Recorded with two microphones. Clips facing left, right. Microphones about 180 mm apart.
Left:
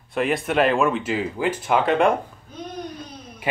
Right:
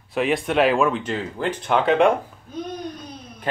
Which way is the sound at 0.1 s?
Centre (ahead or behind).